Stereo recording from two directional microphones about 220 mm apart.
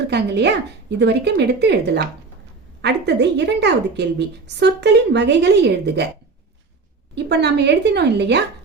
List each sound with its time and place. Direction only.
0.1 s a woman's voice: 50° right (ahead or behind)
7.3 s a woman's voice: 50° right (ahead or behind)